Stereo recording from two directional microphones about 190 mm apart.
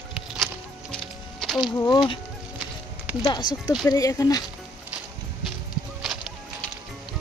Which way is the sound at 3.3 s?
20° left (ahead or behind).